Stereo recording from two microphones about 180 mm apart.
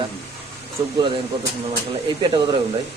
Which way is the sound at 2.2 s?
25° right (ahead or behind).